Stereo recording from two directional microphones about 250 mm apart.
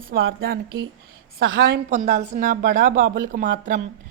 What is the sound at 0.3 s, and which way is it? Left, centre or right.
A woman's voice, right.